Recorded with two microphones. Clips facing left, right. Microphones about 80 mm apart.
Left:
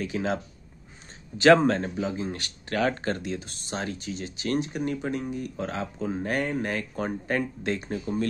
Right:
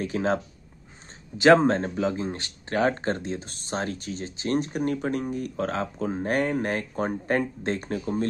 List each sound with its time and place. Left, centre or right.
0.0 s speech: right
1.4 s speech: right
1.8 s speech: right
2.2 s speech: right
4.7 s speech: right